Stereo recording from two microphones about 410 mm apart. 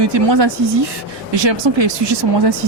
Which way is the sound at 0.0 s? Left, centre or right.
Right.